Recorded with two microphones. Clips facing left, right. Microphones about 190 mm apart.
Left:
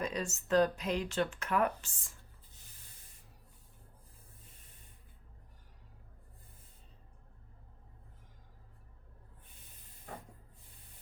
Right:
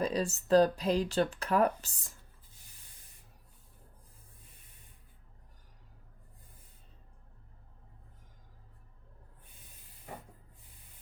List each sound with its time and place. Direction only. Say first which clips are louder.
0.0 s speech: right 5 dB; 35° right (ahead or behind)